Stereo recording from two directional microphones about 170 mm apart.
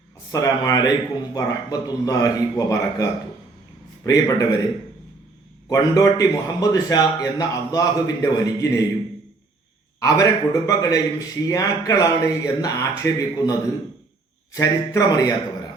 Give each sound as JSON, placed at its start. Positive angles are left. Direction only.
{"t": 0.3, "sound": "a man's voice", "side_deg": 20}
{"t": 5.6, "sound": "a man's voice", "side_deg": 20}
{"t": 10.0, "sound": "a man's voice", "side_deg": 20}